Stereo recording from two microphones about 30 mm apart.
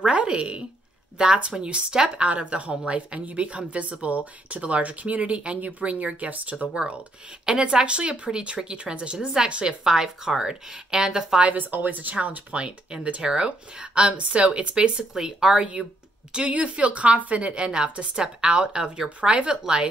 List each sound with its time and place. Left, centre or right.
0.1 s speech: right
2.2 s speech: right
2.7 s speech: right
7.4 s speech: right
9.8 s a woman's voice: centre
11.5 s speech: right
12.5 s speech: right
14.1 s speech: right
18.1 s a woman's voice: right